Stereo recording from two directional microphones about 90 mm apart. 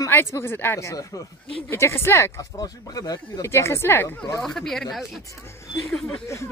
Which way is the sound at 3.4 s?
30° left (ahead or behind).